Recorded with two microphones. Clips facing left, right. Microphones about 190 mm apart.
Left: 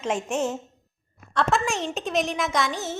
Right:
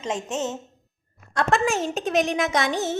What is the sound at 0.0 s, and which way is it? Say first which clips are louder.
Speech: left 2 dB; 10° left (ahead or behind).